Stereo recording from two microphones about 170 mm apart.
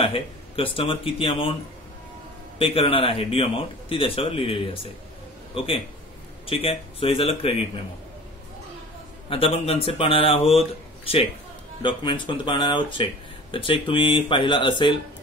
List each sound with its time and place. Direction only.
0.0 s speech: 30° left (ahead or behind)
2.6 s a man's voice: 35° left (ahead or behind)
9.3 s speech: 35° left (ahead or behind)
11.8 s speech: 30° left (ahead or behind)